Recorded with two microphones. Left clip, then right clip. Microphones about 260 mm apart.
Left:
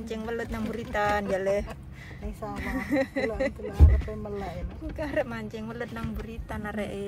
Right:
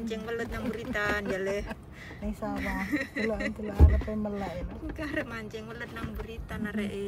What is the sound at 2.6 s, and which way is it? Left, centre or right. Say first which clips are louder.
Speech: left 6 dB; centre.